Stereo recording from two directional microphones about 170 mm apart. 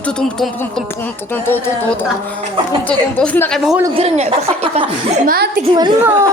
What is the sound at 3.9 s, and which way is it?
Speech, 35° right (ahead or behind).